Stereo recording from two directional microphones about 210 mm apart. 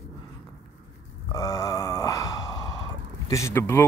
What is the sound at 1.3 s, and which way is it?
Sigh, 15° left (ahead or behind).